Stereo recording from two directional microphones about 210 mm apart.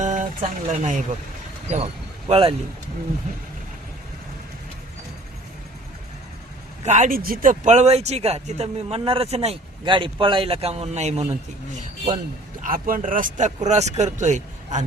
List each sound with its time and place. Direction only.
0.0 s speech: 35° right (ahead or behind)
6.8 s speech: 35° right (ahead or behind)
12.6 s speech: 40° right (ahead or behind)